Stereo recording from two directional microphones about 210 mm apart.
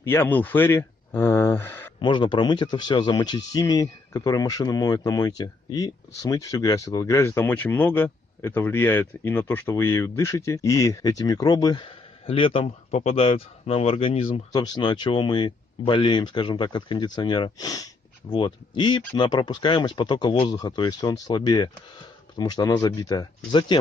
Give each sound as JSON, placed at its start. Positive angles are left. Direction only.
{"t": 0.0, "sound": "speech", "side_deg": 10}
{"t": 2.0, "sound": "speech", "side_deg": 20}